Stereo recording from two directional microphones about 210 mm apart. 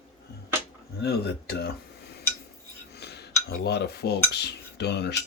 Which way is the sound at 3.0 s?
50° left (ahead or behind).